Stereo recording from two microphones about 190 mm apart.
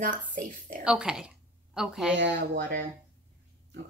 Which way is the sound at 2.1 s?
70° right (ahead or behind).